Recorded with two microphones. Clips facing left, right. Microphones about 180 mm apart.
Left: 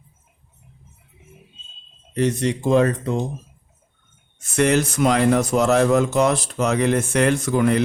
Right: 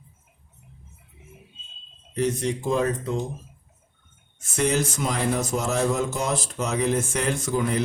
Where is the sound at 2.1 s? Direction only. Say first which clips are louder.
Left 4 dB; 70° left (ahead or behind).